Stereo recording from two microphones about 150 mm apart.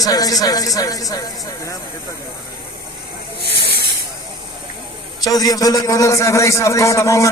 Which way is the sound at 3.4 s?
90° right.